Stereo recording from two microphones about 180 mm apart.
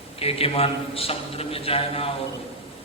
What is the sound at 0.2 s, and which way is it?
A man's voice, 35° left (ahead or behind).